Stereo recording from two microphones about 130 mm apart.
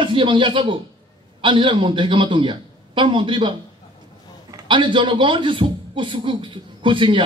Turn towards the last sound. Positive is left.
turn(degrees=-40)  # may be behind; listen again after turning